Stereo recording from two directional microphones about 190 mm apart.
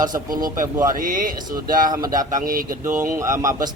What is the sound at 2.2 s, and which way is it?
Speech, 45° right (ahead or behind).